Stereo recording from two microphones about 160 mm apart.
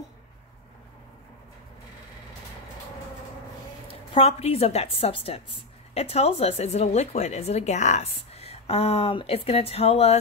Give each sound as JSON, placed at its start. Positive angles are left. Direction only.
{"t": 3.8, "sound": "a woman's voice", "side_deg": 35}